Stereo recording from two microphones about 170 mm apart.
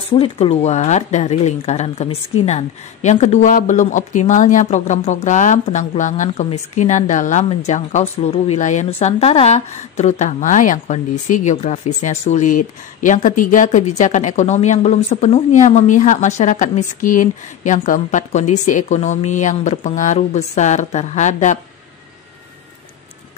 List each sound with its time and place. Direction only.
0.1 s a woman's voice: 35° left (ahead or behind)